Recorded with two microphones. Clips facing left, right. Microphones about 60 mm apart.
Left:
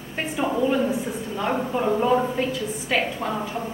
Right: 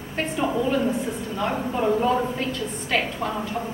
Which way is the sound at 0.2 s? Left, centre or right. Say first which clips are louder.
Even; centre.